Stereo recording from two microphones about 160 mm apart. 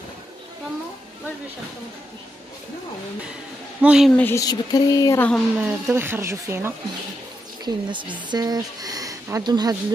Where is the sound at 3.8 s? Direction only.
5° right (ahead or behind).